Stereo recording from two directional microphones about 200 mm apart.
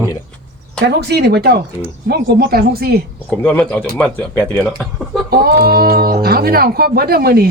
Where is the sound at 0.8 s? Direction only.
55° right (ahead or behind).